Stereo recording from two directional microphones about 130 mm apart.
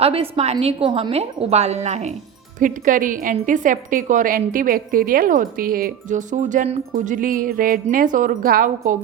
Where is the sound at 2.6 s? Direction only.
90° right.